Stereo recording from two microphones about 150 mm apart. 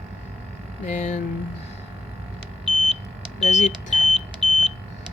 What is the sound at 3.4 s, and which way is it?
Speech, 50° left (ahead or behind).